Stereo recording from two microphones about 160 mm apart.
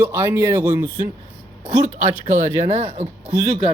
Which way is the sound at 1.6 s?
45° right (ahead or behind).